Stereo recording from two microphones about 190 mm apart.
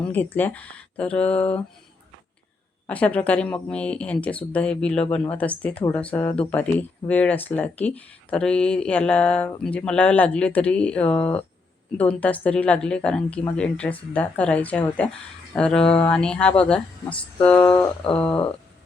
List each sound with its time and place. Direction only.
0.0 s speech: 10° left (ahead or behind)
2.8 s speech: 5° left (ahead or behind)
17.7 s a sound: 25° left (ahead or behind)